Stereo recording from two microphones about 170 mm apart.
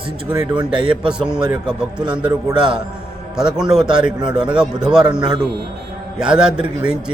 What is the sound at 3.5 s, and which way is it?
A man's voice, 5° right (ahead or behind).